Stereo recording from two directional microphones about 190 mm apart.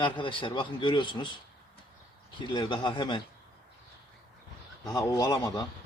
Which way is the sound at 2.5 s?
25° left (ahead or behind).